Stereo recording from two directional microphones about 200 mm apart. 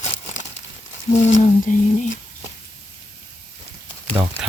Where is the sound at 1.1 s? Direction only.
35° left (ahead or behind).